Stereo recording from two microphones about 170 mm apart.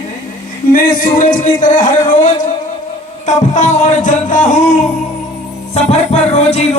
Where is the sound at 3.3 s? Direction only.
45° left (ahead or behind).